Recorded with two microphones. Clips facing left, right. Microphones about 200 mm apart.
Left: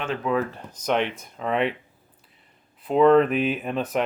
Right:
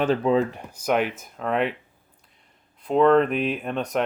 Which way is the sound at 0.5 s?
10° right (ahead or behind).